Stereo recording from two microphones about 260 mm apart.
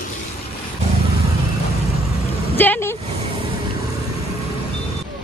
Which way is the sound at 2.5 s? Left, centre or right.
Centre.